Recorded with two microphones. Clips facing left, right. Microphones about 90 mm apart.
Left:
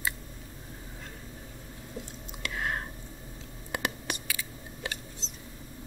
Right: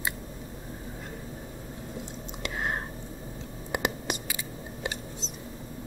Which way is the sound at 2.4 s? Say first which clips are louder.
Right 1 dB; 25° right (ahead or behind).